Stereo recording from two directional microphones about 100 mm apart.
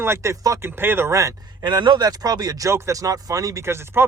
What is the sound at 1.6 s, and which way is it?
Speech, 50° right (ahead or behind).